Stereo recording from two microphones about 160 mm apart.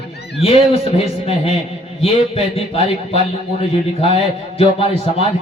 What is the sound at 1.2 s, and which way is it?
A man's voice, 40° left (ahead or behind).